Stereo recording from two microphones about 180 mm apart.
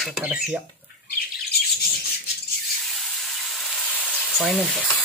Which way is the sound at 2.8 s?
Centre (ahead or behind).